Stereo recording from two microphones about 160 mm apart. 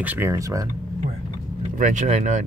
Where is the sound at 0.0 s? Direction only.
10° right (ahead or behind).